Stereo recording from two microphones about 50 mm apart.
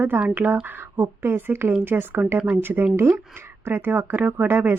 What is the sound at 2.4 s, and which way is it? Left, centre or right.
Speech, right.